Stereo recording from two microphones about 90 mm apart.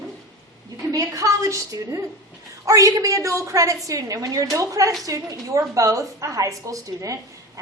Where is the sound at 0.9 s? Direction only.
40° right (ahead or behind).